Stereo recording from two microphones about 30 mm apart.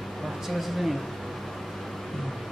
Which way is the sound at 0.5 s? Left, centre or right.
Centre.